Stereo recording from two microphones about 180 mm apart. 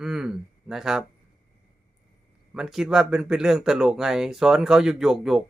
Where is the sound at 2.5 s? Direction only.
Centre (ahead or behind).